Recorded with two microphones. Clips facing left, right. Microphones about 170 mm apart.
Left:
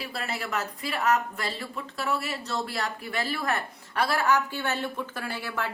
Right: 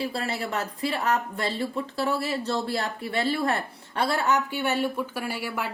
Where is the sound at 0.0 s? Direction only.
30° right (ahead or behind).